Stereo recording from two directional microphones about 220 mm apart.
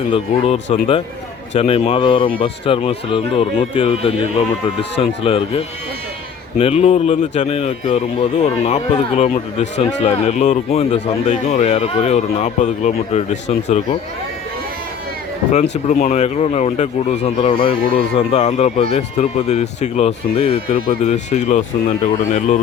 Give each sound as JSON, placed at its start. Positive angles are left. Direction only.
{"t": 0.1, "sound": "speech", "side_deg": 30}
{"t": 15.7, "sound": "speech", "side_deg": 30}
{"t": 20.7, "sound": "speech", "side_deg": 35}